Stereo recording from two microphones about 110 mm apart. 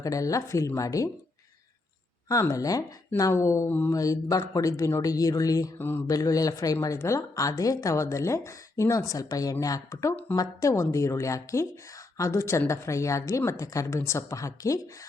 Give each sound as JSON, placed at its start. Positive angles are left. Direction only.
{"t": 0.0, "sound": "a woman's voice", "side_deg": 30}
{"t": 2.3, "sound": "a woman's voice", "side_deg": 30}
{"t": 3.9, "sound": "speech", "side_deg": 30}
{"t": 5.8, "sound": "a woman's voice", "side_deg": 20}
{"t": 6.1, "sound": "a woman's voice", "side_deg": 35}